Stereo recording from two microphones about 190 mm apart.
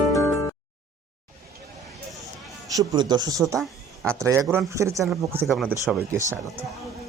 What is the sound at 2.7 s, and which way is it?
Speech, 20° right (ahead or behind).